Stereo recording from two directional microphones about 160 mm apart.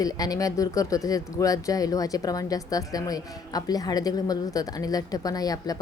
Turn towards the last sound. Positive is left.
turn(degrees=25)  # may be behind; listen again after turning